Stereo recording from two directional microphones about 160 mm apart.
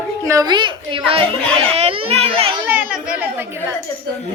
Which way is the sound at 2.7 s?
10° right (ahead or behind).